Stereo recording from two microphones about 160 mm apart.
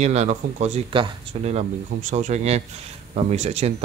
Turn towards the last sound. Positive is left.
turn(degrees=-40)  # may be behind; listen again after turning